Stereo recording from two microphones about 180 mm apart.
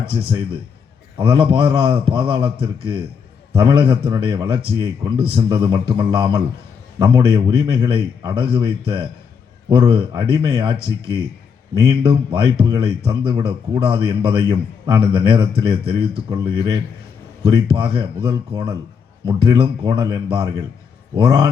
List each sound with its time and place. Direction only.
0.1 s a man's voice: 25° right (ahead or behind)